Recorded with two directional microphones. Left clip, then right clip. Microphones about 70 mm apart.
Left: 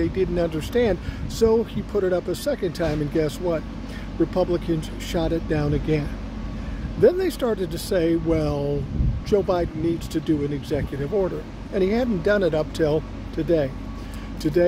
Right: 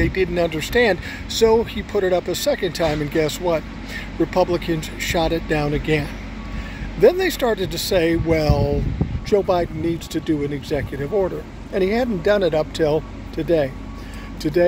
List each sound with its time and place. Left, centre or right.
0.0 s speech: left
8.3 s speech: left
9.3 s speech: left
11.0 s speech: centre
11.7 s speech: left